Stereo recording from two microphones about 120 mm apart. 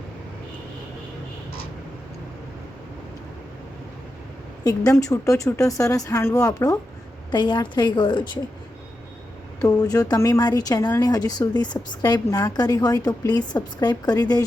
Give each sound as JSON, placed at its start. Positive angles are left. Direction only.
{"t": 4.6, "sound": "a woman's voice", "side_deg": 30}
{"t": 7.3, "sound": "a woman's voice", "side_deg": 40}
{"t": 9.6, "sound": "a woman's voice", "side_deg": 30}